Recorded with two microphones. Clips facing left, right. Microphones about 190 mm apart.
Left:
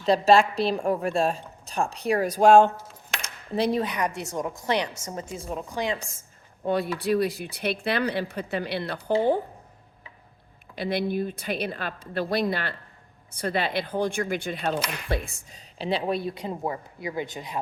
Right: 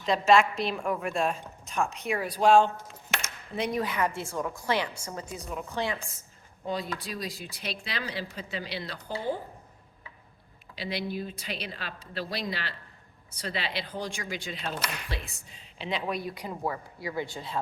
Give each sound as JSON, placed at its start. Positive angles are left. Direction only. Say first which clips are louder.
{"t": 0.0, "sound": "a woman's voice", "louder": "left 3 dB", "side_deg": 35}
{"t": 3.5, "sound": "a woman's voice", "louder": "left 5 dB", "side_deg": 30}
{"t": 5.7, "sound": "speech", "louder": "left 3 dB", "side_deg": 15}
{"t": 6.7, "sound": "speech", "louder": "left 9 dB", "side_deg": 60}
{"t": 10.8, "sound": "speech", "louder": "left 7 dB", "side_deg": 55}